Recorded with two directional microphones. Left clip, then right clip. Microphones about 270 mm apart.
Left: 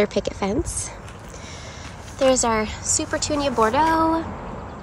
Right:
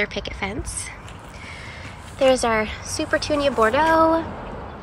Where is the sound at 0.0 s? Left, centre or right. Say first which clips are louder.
Left 3 dB; centre.